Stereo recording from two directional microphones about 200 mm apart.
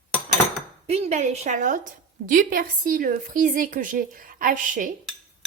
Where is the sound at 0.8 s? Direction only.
35° right (ahead or behind).